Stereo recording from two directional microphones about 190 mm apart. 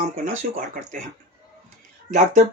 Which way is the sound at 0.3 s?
45° right (ahead or behind).